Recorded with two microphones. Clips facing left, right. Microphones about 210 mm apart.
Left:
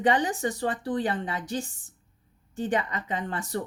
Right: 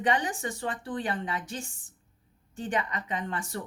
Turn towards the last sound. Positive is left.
turn(degrees=35)  # may be behind; listen again after turning